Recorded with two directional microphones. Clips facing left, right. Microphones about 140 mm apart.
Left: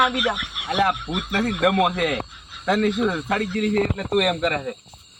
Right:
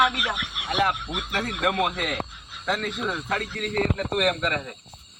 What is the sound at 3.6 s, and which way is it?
Speech, 10° left (ahead or behind).